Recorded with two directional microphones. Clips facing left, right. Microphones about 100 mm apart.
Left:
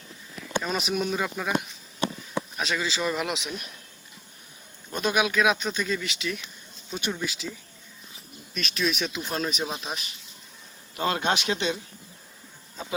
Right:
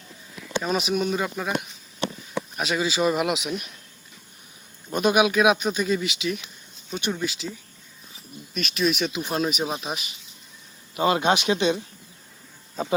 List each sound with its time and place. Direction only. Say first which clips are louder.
0.6 s speech: right 5 dB; 5° right (ahead or behind)
2.6 s speech: right 6 dB; 15° right (ahead or behind)
4.9 s speech: right 5 dB; 15° right (ahead or behind)
8.5 s speech: right 4 dB; 5° right (ahead or behind)